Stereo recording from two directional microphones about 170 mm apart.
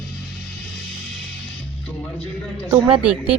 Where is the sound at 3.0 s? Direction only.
5° right (ahead or behind).